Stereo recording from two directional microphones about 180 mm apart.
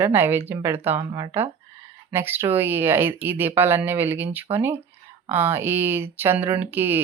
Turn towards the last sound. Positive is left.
turn(degrees=-10)  # may be behind; listen again after turning